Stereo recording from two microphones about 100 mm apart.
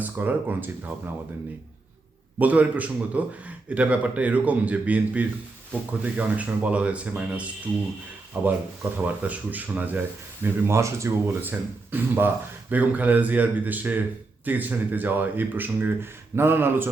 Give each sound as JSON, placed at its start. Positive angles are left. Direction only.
{"t": 0.0, "sound": "speech", "side_deg": -20}
{"t": 2.4, "sound": "a man's voice", "side_deg": -15}
{"t": 8.4, "sound": "a man's voice", "side_deg": -15}
{"t": 10.4, "sound": "a man's voice", "side_deg": -30}